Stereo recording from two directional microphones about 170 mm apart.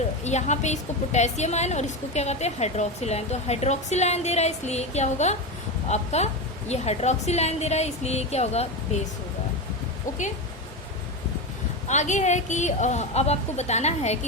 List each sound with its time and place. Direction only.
0.3 s a woman's voice: 40° left (ahead or behind)
11.9 s a woman's voice: 45° left (ahead or behind)